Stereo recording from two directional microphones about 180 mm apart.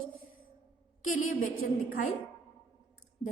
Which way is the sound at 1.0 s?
45° left (ahead or behind).